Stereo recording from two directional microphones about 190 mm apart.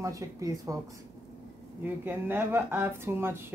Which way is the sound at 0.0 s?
15° right (ahead or behind).